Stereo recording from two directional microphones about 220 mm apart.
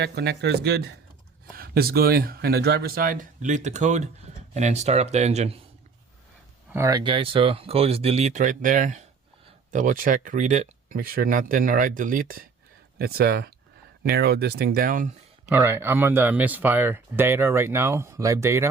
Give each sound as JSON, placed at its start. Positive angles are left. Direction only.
{"t": 0.0, "sound": "speech", "side_deg": -50}
{"t": 6.7, "sound": "speech", "side_deg": -15}
{"t": 15.4, "sound": "speech", "side_deg": -10}